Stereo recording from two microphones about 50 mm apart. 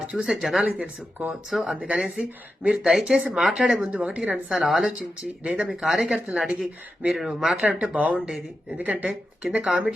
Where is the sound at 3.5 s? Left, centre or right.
Right.